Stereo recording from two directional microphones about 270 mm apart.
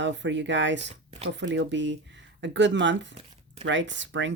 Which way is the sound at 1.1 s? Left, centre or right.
Right.